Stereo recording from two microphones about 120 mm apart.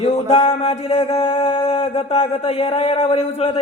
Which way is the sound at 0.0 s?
50° left (ahead or behind).